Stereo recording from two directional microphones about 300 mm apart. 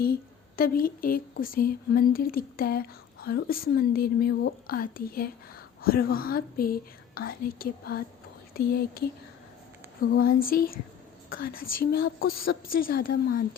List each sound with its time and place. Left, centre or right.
0.0 s a woman's voice: left